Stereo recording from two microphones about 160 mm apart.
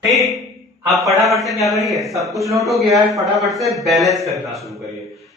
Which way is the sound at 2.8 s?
20° right (ahead or behind).